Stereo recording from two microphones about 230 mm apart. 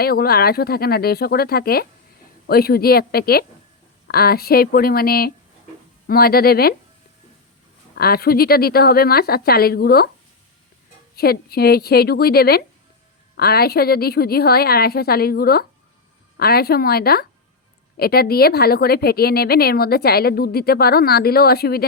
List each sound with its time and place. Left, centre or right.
0.0 s a woman's voice: left
7.9 s speech: left
11.1 s a woman's voice: left